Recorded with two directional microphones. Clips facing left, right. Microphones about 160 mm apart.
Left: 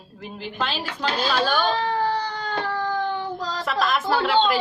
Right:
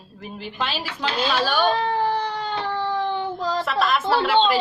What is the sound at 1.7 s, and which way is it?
Baby cry, 25° right (ahead or behind).